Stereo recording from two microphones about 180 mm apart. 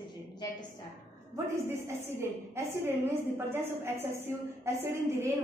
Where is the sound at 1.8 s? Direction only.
15° right (ahead or behind).